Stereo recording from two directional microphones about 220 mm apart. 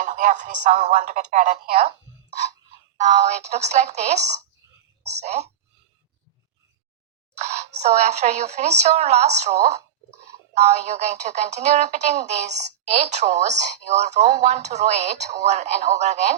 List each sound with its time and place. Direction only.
0.0 s speech: 35° right (ahead or behind)
3.0 s speech: 30° right (ahead or behind)
7.3 s a sound: 30° right (ahead or behind)
7.8 s speech: 30° right (ahead or behind)